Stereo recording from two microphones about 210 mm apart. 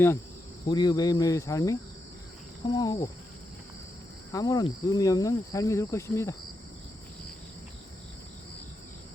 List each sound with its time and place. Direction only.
0.7 s cricket: 20° left (ahead or behind)
4.3 s cricket: 15° left (ahead or behind)